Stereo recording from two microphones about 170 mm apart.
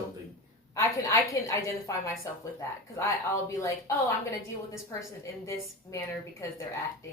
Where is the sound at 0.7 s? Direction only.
20° left (ahead or behind).